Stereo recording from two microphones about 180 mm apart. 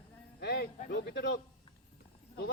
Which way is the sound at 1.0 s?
65° left (ahead or behind).